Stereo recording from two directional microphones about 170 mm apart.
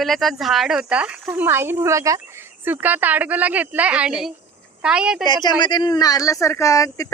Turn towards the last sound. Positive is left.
turn(degrees=20)  # may be behind; listen again after turning